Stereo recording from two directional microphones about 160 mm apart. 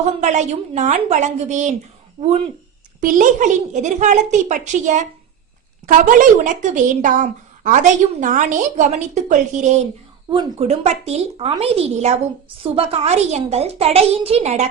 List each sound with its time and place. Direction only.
0.2 s a woman's voice: 45° right (ahead or behind)
3.0 s a woman's voice: 55° right (ahead or behind)
10.2 s a child's voice: 30° right (ahead or behind)